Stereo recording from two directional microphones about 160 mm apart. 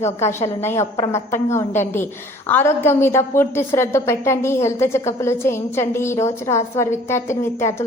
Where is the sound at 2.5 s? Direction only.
15° left (ahead or behind).